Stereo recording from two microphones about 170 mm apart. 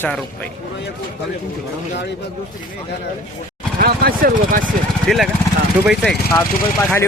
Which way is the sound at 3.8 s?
60° right (ahead or behind).